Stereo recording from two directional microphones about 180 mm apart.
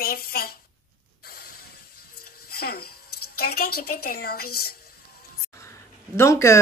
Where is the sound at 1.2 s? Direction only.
55° left (ahead or behind).